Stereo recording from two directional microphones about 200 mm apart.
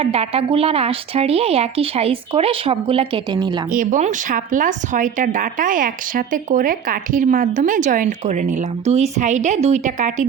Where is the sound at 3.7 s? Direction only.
40° right (ahead or behind).